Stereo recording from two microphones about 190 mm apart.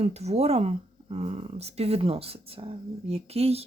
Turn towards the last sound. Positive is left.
turn(degrees=-30)  # may be behind; listen again after turning